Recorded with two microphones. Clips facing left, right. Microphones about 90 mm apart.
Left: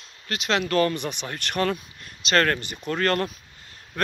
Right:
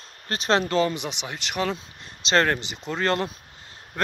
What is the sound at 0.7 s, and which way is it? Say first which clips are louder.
Speech: left 1 dB; 15° right (ahead or behind).